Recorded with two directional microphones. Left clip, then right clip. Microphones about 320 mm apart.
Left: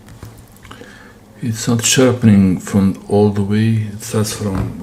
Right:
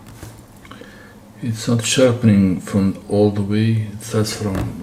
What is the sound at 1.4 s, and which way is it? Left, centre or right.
Speech, left.